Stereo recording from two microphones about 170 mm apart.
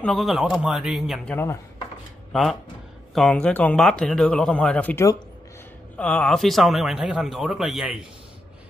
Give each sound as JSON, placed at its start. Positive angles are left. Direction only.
{"t": 0.0, "sound": "a man's voice", "side_deg": 0}
{"t": 1.3, "sound": "chopping", "side_deg": 15}
{"t": 3.2, "sound": "a man's voice", "side_deg": 5}